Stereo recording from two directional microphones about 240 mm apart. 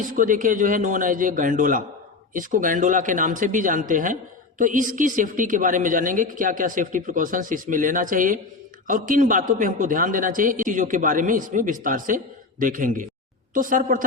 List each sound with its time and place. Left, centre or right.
0.1 s speech: right